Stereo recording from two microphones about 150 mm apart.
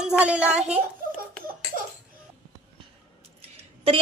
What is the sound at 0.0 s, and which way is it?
Speech, 5° right (ahead or behind).